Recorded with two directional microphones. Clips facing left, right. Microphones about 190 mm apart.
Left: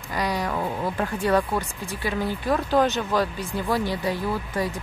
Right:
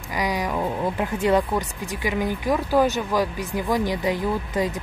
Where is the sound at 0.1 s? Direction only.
15° right (ahead or behind).